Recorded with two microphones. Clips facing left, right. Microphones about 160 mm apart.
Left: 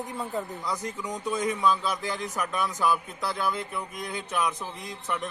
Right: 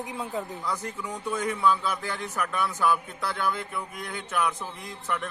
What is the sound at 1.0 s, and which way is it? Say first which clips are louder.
A man's voice: left 2 dB; 15° left (ahead or behind).